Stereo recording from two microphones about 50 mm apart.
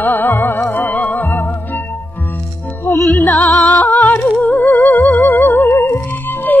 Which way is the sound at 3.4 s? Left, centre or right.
Left.